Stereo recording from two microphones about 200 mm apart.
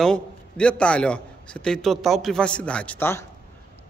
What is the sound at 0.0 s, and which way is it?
A man's voice, 5° left (ahead or behind).